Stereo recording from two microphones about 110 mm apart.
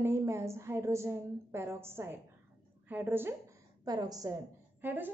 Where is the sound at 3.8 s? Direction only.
35° right (ahead or behind).